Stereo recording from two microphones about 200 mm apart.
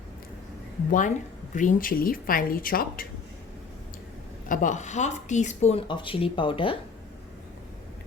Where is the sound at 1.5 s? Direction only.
40° left (ahead or behind).